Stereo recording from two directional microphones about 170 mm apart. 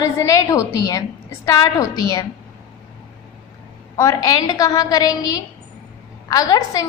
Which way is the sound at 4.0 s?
20° left (ahead or behind).